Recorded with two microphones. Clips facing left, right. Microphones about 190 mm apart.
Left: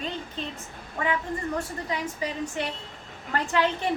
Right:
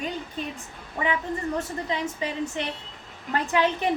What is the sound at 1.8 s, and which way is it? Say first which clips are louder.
A woman's voice: right 2 dB; 25° right (ahead or behind).